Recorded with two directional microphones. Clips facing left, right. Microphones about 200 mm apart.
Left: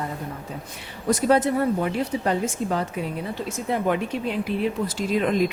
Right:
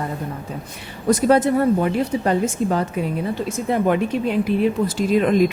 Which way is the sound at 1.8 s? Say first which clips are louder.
Right 4 dB; 50° right (ahead or behind).